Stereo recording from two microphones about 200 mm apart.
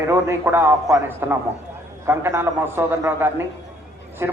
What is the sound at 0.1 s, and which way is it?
A man's voice, 10° right (ahead or behind).